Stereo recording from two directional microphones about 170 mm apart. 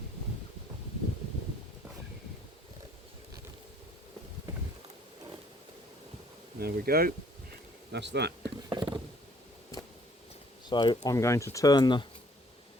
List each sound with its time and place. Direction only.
6.6 s speech: 65° right (ahead or behind)
7.9 s speech: 85° right
8.4 s a sound: 25° right (ahead or behind)
10.7 s speech: 25° left (ahead or behind)